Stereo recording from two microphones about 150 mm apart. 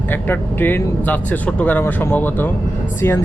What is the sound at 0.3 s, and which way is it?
Speech, 15° left (ahead or behind).